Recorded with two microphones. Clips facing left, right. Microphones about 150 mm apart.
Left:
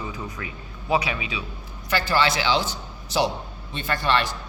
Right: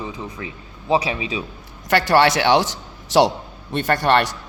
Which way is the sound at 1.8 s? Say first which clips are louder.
Right 7 dB; 75° right (ahead or behind).